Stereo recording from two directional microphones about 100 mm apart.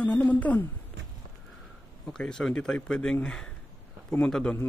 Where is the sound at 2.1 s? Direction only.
5° left (ahead or behind).